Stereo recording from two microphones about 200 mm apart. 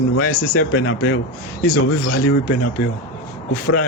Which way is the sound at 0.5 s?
90° left.